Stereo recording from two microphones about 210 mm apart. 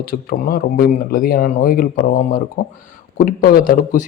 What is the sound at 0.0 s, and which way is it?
A man's voice, 45° left (ahead or behind).